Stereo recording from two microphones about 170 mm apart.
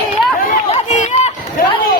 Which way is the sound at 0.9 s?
45° left (ahead or behind).